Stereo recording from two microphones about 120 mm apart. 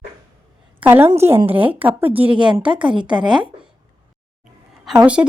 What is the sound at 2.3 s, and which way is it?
Speech, 40° right (ahead or behind).